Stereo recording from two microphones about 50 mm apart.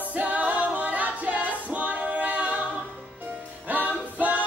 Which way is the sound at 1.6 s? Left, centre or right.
Right.